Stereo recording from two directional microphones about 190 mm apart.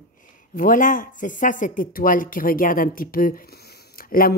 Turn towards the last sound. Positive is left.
turn(degrees=50)  # may be behind; listen again after turning